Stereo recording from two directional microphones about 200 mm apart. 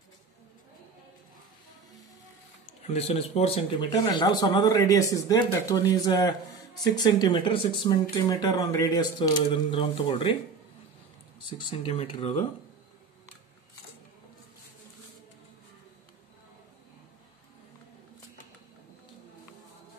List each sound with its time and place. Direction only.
2.9 s speech: 30° left (ahead or behind)
11.7 s speech: 30° left (ahead or behind)